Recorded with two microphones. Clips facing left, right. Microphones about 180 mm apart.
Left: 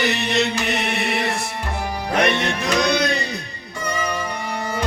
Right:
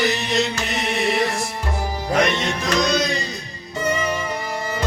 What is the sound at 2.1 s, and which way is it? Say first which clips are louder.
Music: even; 60° left (ahead or behind).